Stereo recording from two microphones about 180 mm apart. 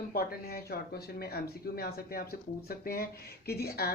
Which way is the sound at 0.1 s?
55° left (ahead or behind).